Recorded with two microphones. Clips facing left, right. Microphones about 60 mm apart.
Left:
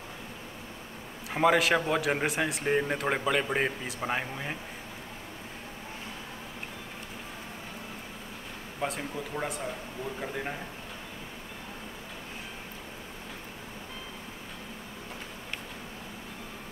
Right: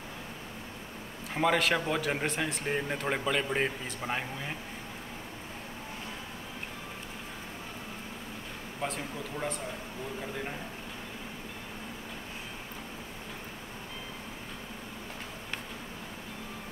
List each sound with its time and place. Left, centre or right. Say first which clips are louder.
1.3 s a man's voice: left 3 dB; centre
9.3 s a man's voice: left 1 dB; left